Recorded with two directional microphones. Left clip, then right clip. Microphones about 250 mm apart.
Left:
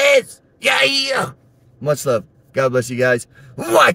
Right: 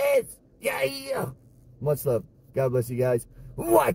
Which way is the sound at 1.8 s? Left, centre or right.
Left.